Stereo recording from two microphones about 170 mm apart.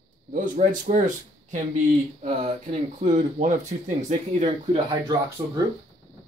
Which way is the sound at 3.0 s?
45° right (ahead or behind).